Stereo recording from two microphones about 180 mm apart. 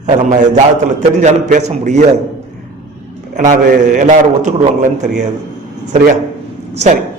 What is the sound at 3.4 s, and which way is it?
A man's voice, 50° right (ahead or behind).